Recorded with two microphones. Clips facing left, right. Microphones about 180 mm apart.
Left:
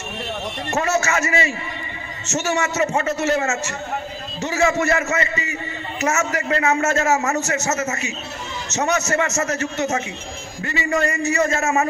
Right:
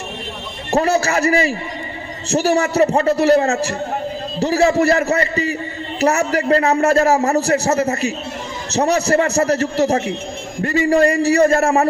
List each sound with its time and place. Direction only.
0.7 s a man's voice: 35° right (ahead or behind)